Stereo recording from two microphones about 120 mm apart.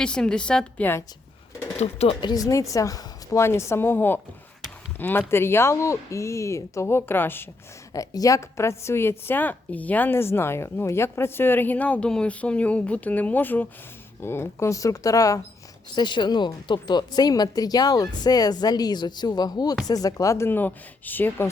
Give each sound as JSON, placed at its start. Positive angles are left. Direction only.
{"t": 0.0, "sound": "a woman's voice", "side_deg": 5}
{"t": 1.8, "sound": "speech", "side_deg": 60}
{"t": 2.2, "sound": "speech", "side_deg": 30}
{"t": 7.9, "sound": "a woman's voice", "side_deg": 30}
{"t": 16.0, "sound": "speech", "side_deg": 40}